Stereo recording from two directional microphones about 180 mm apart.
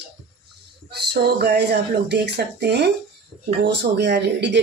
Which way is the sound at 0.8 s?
65° right (ahead or behind).